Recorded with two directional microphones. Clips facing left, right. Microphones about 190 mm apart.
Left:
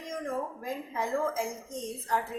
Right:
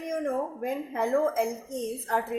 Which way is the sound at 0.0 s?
60° right (ahead or behind).